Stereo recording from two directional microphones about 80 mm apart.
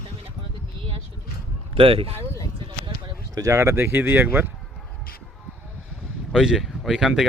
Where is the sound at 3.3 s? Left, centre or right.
Right.